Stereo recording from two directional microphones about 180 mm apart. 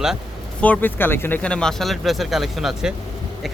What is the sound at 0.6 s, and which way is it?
A man's voice, 10° left (ahead or behind).